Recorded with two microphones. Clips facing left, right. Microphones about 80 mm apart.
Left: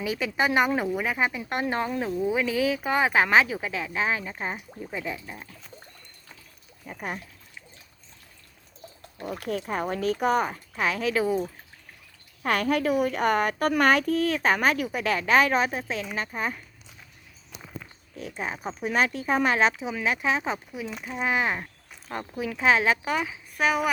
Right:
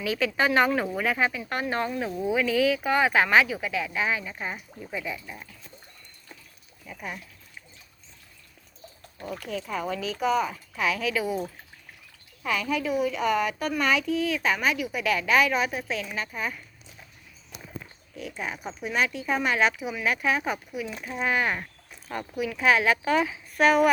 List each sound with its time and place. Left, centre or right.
0.0 s speech: centre
2.0 s speech: centre
2.3 s speech: left
6.8 s speech: left
9.4 s a woman's voice: left
10.5 s speech: left
12.5 s a woman's voice: left
18.2 s speech: left
21.0 s speech: centre
23.1 s a woman's voice: centre